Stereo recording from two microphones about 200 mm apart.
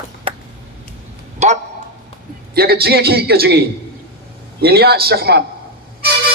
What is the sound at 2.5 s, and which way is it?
A man's voice, 50° right (ahead or behind).